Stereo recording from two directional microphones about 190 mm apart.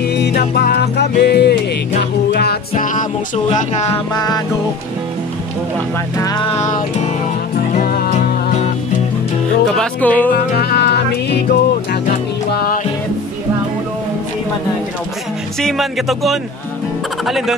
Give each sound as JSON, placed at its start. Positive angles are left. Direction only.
{"t": 0.0, "sound": "music", "side_deg": 60}
{"t": 2.7, "sound": "music", "side_deg": 45}
{"t": 3.5, "sound": "speech", "side_deg": 35}
{"t": 4.1, "sound": "music", "side_deg": 20}
{"t": 6.1, "sound": "music", "side_deg": 20}
{"t": 7.7, "sound": "music", "side_deg": 50}
{"t": 8.5, "sound": "music", "side_deg": 40}
{"t": 9.8, "sound": "speech", "side_deg": 10}
{"t": 10.3, "sound": "music", "side_deg": 55}
{"t": 15.6, "sound": "speech", "side_deg": 0}
{"t": 17.2, "sound": "music", "side_deg": 0}